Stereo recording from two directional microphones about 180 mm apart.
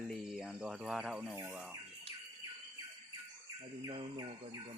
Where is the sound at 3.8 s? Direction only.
25° right (ahead or behind).